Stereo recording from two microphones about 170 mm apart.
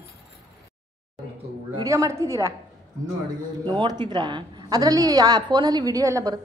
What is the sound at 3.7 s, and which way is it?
A woman's voice, 25° right (ahead or behind).